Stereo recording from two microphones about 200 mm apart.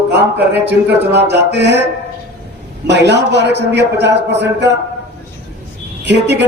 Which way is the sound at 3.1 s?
60° right (ahead or behind).